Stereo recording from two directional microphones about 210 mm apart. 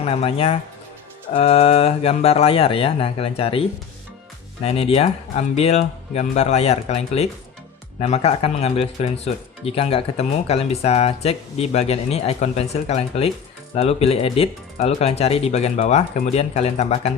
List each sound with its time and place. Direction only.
0.0 s speech: 30° left (ahead or behind)